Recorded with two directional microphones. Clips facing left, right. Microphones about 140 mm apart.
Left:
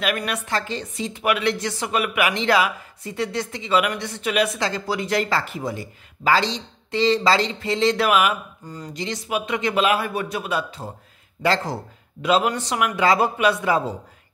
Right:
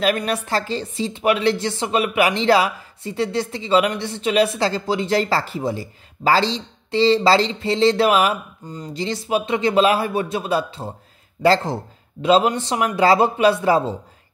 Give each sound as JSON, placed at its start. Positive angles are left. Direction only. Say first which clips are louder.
{"t": 0.0, "sound": "speech", "louder": "right 5 dB", "side_deg": -30}